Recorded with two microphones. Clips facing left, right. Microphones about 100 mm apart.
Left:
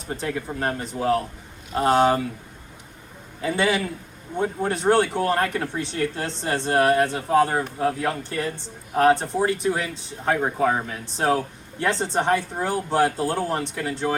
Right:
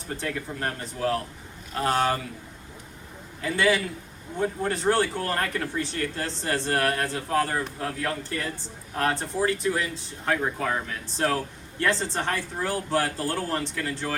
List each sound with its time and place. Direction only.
0.1 s speech: 20° left (ahead or behind)
3.4 s speech: 20° left (ahead or behind)